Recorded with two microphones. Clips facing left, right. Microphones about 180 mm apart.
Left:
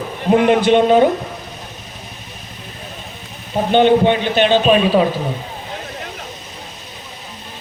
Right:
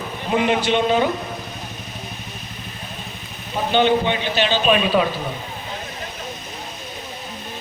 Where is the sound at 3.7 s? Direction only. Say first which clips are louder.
Left 6 dB; 50° left (ahead or behind).